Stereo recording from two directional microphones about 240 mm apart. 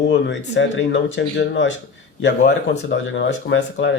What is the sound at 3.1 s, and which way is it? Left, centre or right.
Speech, left.